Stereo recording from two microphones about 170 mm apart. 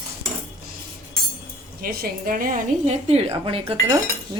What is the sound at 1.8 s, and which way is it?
Speech, 60° right (ahead or behind).